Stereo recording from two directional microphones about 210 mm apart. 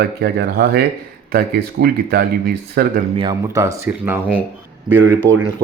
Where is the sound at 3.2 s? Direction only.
15° right (ahead or behind).